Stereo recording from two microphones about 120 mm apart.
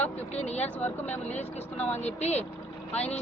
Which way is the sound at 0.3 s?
65° left (ahead or behind).